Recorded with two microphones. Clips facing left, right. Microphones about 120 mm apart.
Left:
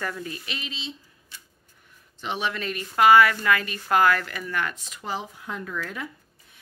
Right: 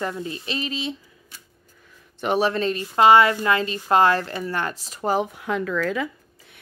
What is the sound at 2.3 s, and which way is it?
A woman's voice, 35° right (ahead or behind).